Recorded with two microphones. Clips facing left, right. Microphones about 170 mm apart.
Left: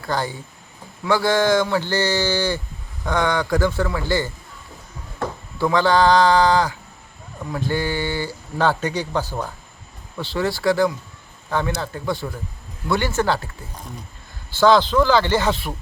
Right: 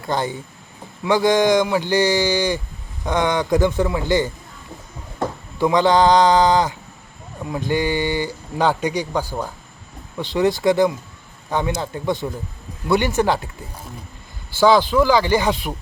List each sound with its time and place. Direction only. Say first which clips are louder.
0.0 s a man's voice: right 2 dB; 20° right (ahead or behind)
5.5 s a man's voice: right 2 dB; 20° right (ahead or behind)